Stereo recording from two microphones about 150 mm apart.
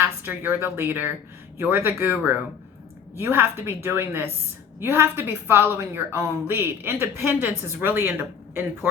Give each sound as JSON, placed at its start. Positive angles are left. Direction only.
{"t": 0.0, "sound": "a woman's voice", "side_deg": -15}